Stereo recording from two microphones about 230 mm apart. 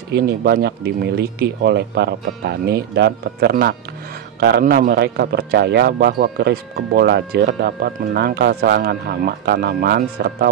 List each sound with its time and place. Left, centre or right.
0.1 s a man's voice: right